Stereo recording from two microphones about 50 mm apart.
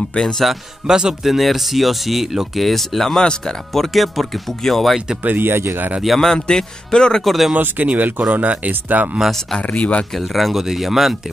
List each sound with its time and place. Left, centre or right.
0.2 s speech: centre
0.8 s speech: centre
5.2 s speech: right
5.5 s speech: right
6.0 s speech: centre
6.3 s speech: centre
7.2 s speech: centre
7.5 s speech: right
9.6 s speech: left
10.1 s speech: centre